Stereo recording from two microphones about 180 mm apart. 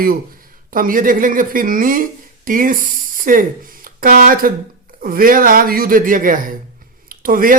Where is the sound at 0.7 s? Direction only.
50° right (ahead or behind).